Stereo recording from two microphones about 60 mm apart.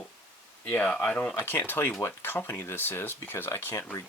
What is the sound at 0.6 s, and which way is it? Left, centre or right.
Speech, left.